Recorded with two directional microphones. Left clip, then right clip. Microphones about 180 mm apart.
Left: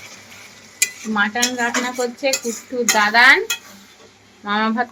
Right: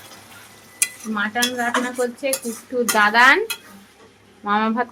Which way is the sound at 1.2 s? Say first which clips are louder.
Left 3 dB; 25° left (ahead or behind).